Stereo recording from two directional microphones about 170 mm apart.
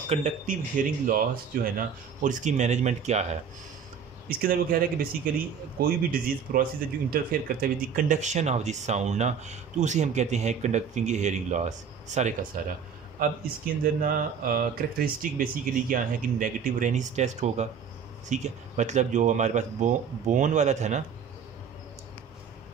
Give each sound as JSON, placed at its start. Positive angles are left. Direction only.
{"t": 0.1, "sound": "speech", "side_deg": -45}
{"t": 4.3, "sound": "speech", "side_deg": -60}
{"t": 14.0, "sound": "speech", "side_deg": -60}